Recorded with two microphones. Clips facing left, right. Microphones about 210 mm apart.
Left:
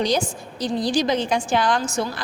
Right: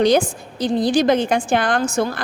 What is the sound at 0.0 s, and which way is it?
A woman's voice, 55° right (ahead or behind).